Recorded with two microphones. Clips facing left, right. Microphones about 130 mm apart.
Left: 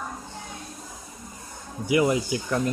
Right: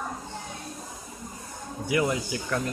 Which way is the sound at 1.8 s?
15° left (ahead or behind).